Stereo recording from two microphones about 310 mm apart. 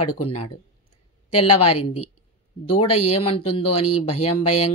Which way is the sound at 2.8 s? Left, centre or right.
Left.